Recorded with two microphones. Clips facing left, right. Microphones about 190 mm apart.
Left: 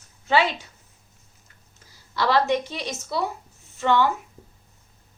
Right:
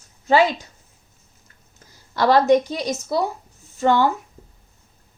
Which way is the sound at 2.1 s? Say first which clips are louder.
Right 6 dB; 45° right (ahead or behind).